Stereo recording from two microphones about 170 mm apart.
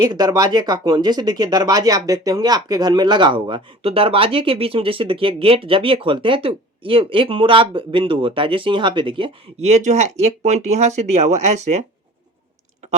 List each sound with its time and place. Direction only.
0.0 s speech: 20° right (ahead or behind); by 11.9 s 45° right (ahead or behind)